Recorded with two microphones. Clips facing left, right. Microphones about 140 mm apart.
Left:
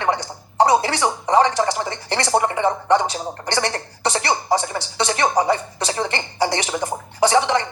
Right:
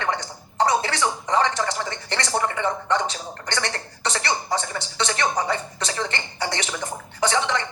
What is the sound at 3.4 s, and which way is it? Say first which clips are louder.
Speech: left 5 dB; 35° left (ahead or behind).